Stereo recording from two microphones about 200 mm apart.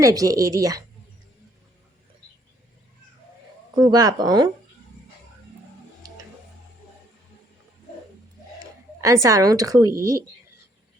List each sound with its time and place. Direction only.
0.0 s a woman's voice: 15° right (ahead or behind)
3.8 s speech: 20° right (ahead or behind)
8.5 s speech: 15° right (ahead or behind)